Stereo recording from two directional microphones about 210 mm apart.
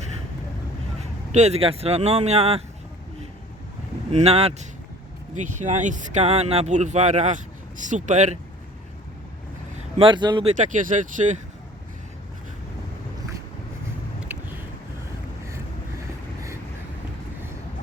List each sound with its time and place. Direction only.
1.3 s speech: 30° right (ahead or behind)
4.1 s speech: 30° right (ahead or behind)
10.0 s speech: 20° right (ahead or behind)
10.6 s speech: 35° right (ahead or behind)
14.2 s a sound: 10° right (ahead or behind)